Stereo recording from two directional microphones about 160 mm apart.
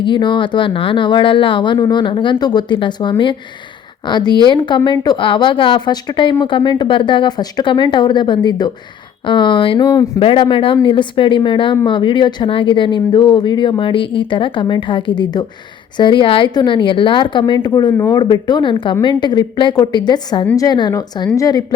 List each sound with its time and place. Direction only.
0.0 s speech: 30° left (ahead or behind)